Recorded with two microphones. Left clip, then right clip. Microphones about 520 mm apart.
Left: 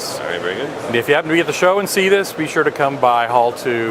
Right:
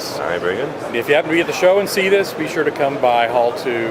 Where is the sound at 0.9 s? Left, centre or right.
Left.